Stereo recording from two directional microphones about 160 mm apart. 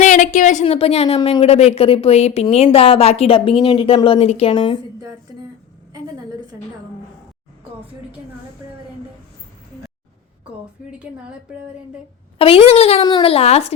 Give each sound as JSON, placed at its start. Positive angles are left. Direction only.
{"t": 0.0, "sound": "a woman's voice", "side_deg": 50}
{"t": 12.4, "sound": "a woman's voice", "side_deg": 40}
{"t": 13.0, "sound": "a woman's voice", "side_deg": 30}